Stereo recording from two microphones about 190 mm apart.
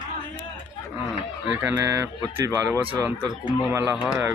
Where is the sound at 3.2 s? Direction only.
5° left (ahead or behind).